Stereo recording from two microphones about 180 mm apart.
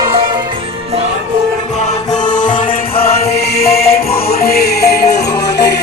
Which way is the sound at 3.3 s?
60° left (ahead or behind).